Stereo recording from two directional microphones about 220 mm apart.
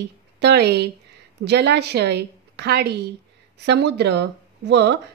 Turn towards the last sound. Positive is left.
turn(degrees=-50)  # may be behind; listen again after turning